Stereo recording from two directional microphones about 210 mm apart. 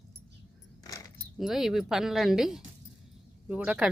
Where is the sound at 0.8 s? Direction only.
15° left (ahead or behind).